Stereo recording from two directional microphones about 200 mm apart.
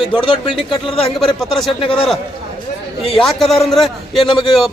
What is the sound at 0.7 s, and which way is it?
Speech, 25° left (ahead or behind).